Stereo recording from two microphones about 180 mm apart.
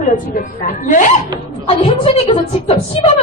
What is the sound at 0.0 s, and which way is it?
A woman's voice, 45° left (ahead or behind).